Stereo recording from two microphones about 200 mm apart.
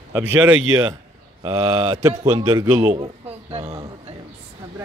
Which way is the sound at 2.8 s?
30° right (ahead or behind).